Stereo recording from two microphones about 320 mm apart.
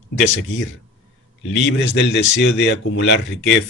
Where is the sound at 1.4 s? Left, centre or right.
Left.